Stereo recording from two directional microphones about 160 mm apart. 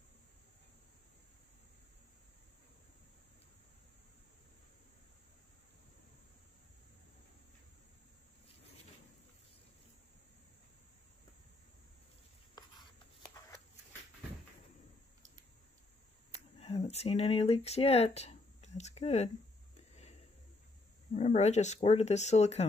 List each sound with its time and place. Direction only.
12.6 s a sound: 25° left (ahead or behind)
16.5 s speech: 40° left (ahead or behind)
21.1 s speech: 45° left (ahead or behind)